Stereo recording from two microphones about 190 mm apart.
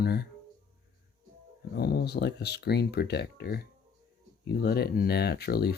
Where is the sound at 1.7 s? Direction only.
55° left (ahead or behind).